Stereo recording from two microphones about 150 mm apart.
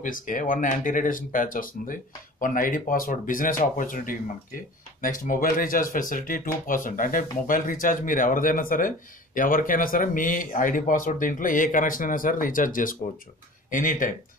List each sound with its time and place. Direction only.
0.0 s speech: 65° left (ahead or behind)